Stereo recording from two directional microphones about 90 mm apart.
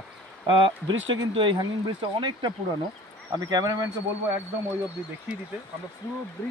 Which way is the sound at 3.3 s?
45° right (ahead or behind).